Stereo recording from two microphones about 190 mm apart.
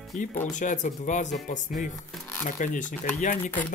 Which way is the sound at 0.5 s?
40° left (ahead or behind).